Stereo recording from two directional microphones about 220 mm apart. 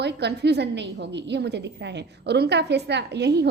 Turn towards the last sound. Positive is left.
turn(degrees=-50)  # may be behind; listen again after turning